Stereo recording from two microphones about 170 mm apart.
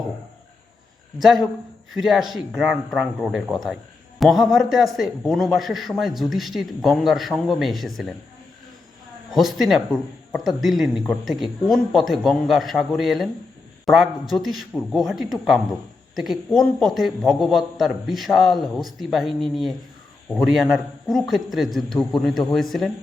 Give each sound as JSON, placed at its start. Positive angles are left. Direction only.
{"t": 1.2, "sound": "speech", "side_deg": 0}
{"t": 9.3, "sound": "speech", "side_deg": 0}